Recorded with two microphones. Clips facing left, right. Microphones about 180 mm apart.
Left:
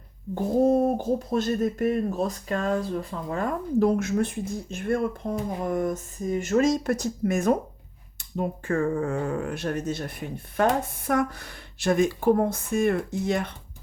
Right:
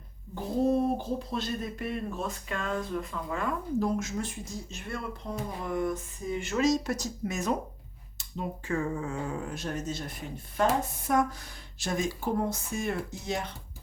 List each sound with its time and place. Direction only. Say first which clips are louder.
0.6 s a sound: left 5 dB; 45° left (ahead or behind)
1.3 s speech: left 9 dB; 45° left (ahead or behind)
3.8 s speech: left 10 dB; 60° left (ahead or behind)